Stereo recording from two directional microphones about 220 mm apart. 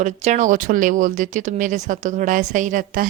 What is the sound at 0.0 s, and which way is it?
Speech, 35° right (ahead or behind).